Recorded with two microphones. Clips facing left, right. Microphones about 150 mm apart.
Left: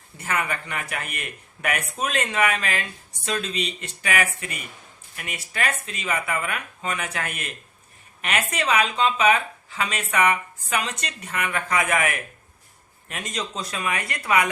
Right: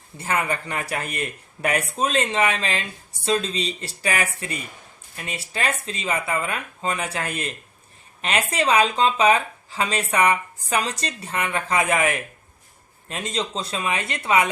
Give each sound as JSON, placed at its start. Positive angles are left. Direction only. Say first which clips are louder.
{"t": 0.2, "sound": "speech", "louder": "right 3 dB", "side_deg": -30}